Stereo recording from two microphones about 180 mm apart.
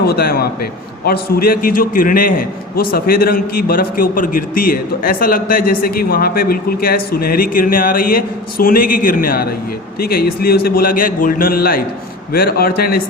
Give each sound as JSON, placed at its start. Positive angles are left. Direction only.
{"t": 0.0, "sound": "a man's voice", "side_deg": 60}